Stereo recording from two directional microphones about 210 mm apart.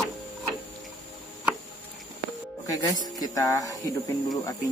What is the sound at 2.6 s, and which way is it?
A man's voice, 15° left (ahead or behind).